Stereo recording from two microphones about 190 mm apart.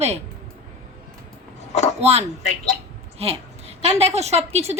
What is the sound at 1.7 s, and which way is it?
Speech, 35° left (ahead or behind).